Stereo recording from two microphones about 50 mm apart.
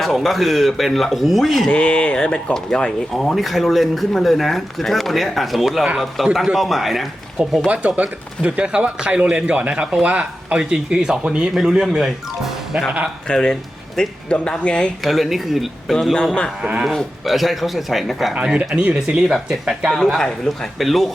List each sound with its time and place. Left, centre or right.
0.0 s speech: centre
1.7 s a man's voice: left
3.2 s speech: centre
7.7 s speech: right
11.5 s speech: centre
13.2 s speech: centre
15.0 s speech: centre
15.9 s a man's voice: centre
18.7 s speech: right
18.9 s speech: centre
19.9 s a man's voice: centre
20.7 s speech: centre